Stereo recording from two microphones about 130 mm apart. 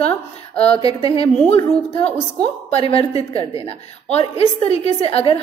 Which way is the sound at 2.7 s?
45° left (ahead or behind).